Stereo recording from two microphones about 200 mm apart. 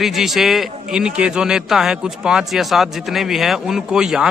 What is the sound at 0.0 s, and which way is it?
A man's voice, centre (ahead or behind).